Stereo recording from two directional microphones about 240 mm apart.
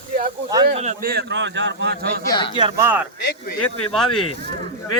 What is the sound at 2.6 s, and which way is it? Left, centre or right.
Speech, centre.